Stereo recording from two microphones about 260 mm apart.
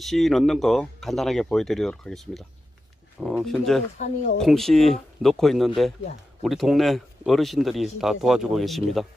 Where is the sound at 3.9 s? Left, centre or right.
Left.